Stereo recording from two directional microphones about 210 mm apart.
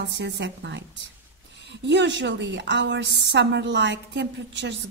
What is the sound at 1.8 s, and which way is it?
A woman's voice, 55° right (ahead or behind).